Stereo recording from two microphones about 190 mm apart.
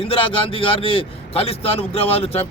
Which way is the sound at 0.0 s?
30° left (ahead or behind).